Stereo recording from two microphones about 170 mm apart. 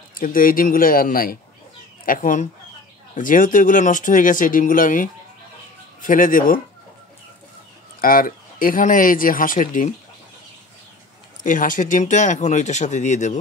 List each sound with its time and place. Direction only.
0.1 s a man's voice: 55° left (ahead or behind)
8.0 s speech: 55° left (ahead or behind)
11.4 s speech: 50° left (ahead or behind)